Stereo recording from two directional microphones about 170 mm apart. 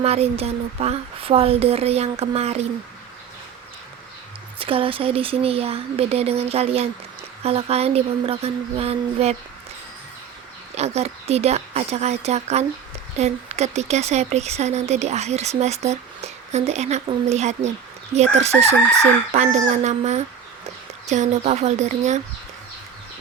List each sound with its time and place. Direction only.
0.0 s speech: 35° right (ahead or behind)
4.6 s speech: 30° right (ahead or behind)
10.8 s a woman's voice: 40° right (ahead or behind)